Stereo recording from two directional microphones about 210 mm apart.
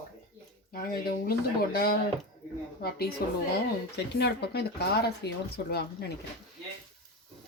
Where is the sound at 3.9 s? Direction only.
50° left (ahead or behind).